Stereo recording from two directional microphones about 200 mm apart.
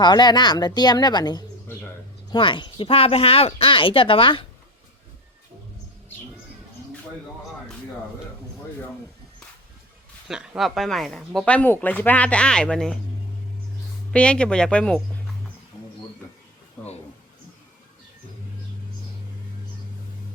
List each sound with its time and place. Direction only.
0.0 s speech: 20° left (ahead or behind)
10.2 s speech: 5° right (ahead or behind)
14.1 s speech: 5° left (ahead or behind)